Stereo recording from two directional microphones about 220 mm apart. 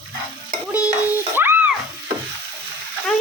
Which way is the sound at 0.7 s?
5° right (ahead or behind).